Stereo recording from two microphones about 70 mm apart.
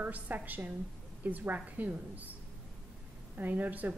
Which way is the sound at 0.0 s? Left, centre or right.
Right.